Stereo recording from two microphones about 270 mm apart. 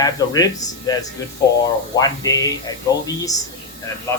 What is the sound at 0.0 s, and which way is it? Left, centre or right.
Speech, centre.